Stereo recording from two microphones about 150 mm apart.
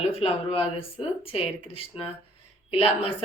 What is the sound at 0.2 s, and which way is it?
A woman's voice, 40° left (ahead or behind).